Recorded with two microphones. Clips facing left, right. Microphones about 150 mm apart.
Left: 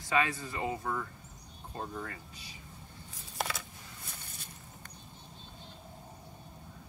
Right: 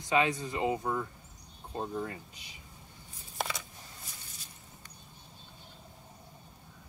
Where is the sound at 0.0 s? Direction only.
20° right (ahead or behind).